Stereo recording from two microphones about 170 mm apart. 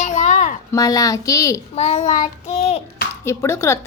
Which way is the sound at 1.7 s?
40° left (ahead or behind).